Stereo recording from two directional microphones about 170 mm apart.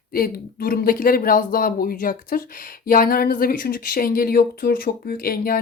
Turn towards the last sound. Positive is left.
turn(degrees=60)  # may be behind; listen again after turning